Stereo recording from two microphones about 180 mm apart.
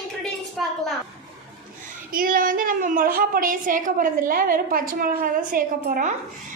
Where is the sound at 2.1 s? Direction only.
50° right (ahead or behind).